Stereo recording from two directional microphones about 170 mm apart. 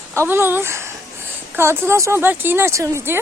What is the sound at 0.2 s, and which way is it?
Speech, 15° right (ahead or behind).